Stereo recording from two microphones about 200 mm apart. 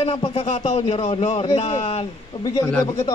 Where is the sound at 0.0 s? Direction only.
25° left (ahead or behind).